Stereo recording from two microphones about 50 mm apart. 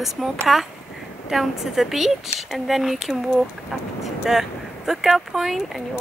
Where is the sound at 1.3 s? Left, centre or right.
Centre.